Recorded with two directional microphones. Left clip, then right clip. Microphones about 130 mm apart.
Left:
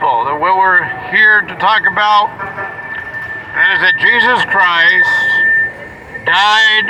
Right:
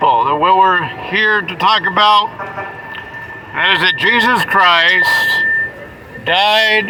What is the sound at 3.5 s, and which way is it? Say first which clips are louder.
Speech: left 2 dB; 10° right (ahead or behind).